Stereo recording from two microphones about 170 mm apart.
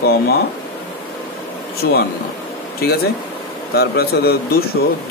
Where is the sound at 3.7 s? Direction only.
70° left (ahead or behind).